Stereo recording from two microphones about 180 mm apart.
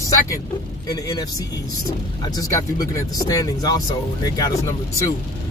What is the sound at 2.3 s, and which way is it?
Speech, 20° left (ahead or behind).